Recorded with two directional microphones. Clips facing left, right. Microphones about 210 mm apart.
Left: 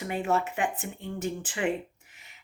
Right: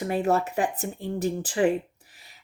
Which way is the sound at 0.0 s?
40° right (ahead or behind).